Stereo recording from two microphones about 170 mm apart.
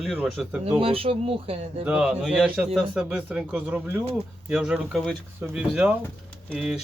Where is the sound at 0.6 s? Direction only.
35° right (ahead or behind).